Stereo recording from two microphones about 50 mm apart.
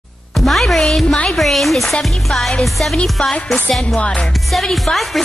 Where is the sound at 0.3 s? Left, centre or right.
Centre.